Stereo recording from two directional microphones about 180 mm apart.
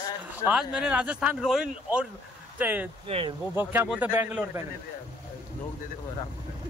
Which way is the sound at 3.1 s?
30° right (ahead or behind).